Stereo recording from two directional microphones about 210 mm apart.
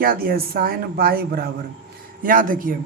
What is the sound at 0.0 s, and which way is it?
A man's voice, 45° right (ahead or behind).